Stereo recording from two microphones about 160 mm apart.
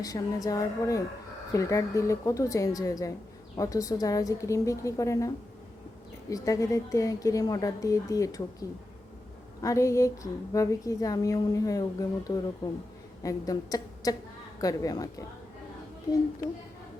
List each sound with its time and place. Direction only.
0.0 s a woman's voice: 20° left (ahead or behind)
6.3 s a woman's voice: 20° left (ahead or behind)
9.6 s a woman's voice: 20° left (ahead or behind)